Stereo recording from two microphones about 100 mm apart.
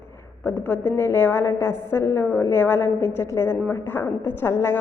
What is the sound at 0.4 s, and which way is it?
A woman's voice, 20° left (ahead or behind).